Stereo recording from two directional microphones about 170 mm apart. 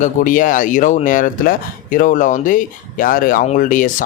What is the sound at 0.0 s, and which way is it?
Speech, 50° left (ahead or behind).